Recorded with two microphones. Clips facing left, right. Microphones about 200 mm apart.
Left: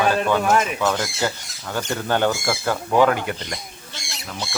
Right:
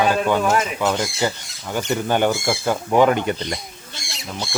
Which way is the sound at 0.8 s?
15° right (ahead or behind).